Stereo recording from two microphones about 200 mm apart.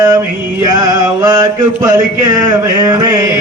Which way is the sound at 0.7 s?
20° right (ahead or behind).